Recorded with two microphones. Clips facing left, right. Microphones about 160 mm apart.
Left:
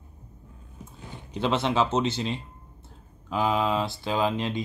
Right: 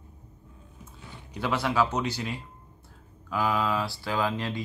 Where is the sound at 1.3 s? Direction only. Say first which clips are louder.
Left 2 dB; 25° left (ahead or behind).